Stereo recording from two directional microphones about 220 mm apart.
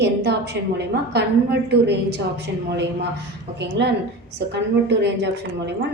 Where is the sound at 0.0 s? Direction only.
50° right (ahead or behind).